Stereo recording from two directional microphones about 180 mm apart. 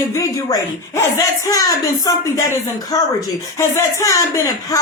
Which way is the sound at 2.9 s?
20° left (ahead or behind).